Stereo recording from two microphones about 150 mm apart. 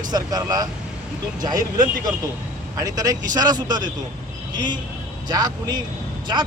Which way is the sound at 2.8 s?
25° right (ahead or behind).